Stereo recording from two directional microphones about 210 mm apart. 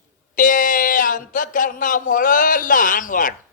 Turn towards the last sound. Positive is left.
turn(degrees=40)  # may be behind; listen again after turning